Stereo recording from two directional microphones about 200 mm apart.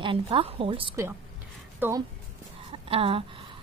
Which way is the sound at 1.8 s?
15° right (ahead or behind).